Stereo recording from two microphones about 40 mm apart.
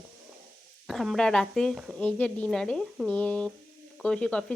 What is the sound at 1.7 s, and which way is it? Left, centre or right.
Speech, centre.